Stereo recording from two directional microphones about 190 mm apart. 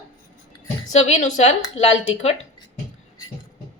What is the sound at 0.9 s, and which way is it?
A woman's voice, 40° left (ahead or behind).